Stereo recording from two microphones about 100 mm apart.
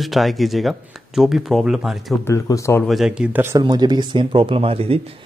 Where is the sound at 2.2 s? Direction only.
30° left (ahead or behind).